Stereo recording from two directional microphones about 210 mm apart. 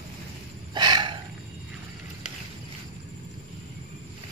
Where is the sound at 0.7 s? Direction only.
20° right (ahead or behind).